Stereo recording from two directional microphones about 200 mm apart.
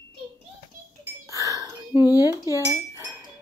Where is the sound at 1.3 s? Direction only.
15° right (ahead or behind).